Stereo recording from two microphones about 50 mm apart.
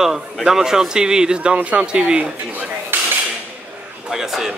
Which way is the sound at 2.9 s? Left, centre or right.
Right.